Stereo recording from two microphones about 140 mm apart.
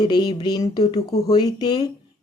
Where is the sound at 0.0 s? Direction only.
30° left (ahead or behind).